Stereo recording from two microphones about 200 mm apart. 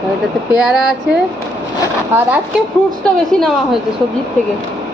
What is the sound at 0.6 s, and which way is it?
Speech, 5° right (ahead or behind).